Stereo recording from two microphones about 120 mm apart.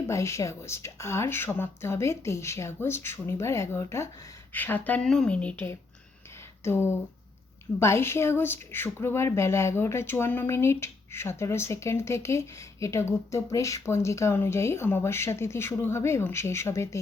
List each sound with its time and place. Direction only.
0.1 s speech: 25° left (ahead or behind)
6.7 s speech: 20° left (ahead or behind)